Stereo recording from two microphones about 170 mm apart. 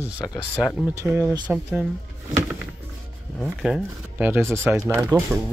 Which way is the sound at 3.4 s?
Centre (ahead or behind).